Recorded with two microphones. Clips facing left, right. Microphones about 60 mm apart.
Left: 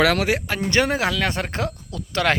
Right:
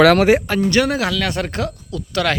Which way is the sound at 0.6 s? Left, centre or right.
Left.